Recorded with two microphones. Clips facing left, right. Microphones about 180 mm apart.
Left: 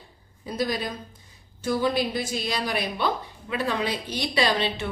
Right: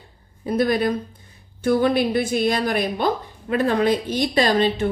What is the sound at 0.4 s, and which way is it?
A woman's voice, 55° right (ahead or behind).